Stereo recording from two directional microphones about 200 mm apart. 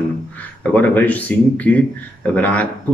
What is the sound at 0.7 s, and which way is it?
Speech, 10° left (ahead or behind).